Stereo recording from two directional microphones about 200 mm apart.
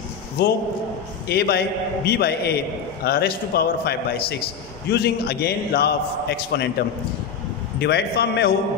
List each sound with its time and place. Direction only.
1.2 s a man's voice: 55° left (ahead or behind)
7.8 s a man's voice: 55° left (ahead or behind)